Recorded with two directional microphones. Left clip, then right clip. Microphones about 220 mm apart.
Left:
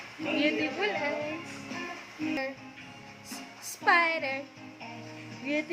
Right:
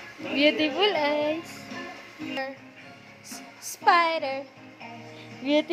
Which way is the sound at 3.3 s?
15° right (ahead or behind).